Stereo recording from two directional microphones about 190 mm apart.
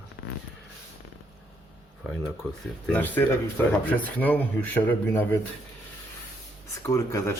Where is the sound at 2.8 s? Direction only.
10° left (ahead or behind).